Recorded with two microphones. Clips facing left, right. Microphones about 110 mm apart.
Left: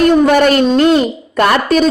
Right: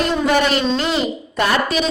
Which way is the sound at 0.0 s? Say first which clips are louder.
Left 8 dB; 50° left (ahead or behind).